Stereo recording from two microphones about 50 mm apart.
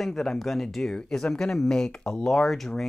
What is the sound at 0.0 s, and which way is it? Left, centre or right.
Speech, centre.